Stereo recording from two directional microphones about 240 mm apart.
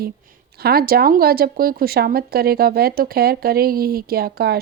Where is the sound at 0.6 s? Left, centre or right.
Right.